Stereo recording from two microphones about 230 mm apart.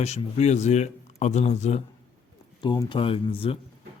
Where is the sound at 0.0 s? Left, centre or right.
Left.